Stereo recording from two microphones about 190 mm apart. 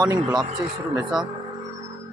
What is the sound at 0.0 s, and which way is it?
Speech, 20° right (ahead or behind).